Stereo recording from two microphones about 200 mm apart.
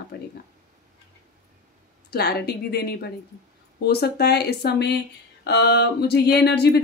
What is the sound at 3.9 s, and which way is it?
Speech, 55° left (ahead or behind).